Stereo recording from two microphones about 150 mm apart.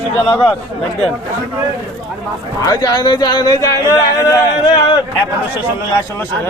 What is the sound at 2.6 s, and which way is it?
Speech, 25° left (ahead or behind).